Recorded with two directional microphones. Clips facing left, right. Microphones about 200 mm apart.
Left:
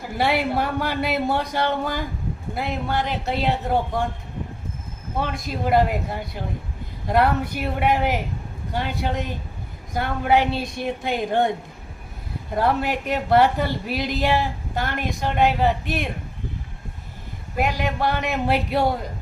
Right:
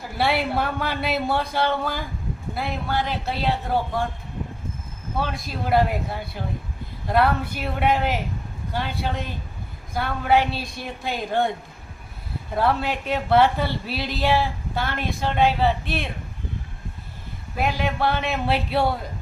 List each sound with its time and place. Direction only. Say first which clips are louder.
0.2 s a woman's voice: left 1 dB; 15° left (ahead or behind)
5.1 s a woman's voice: left 1 dB; 15° left (ahead or behind)
12.5 s a woman's voice: left 1 dB; 15° left (ahead or behind)
17.6 s a woman's voice: left 1 dB; 15° left (ahead or behind)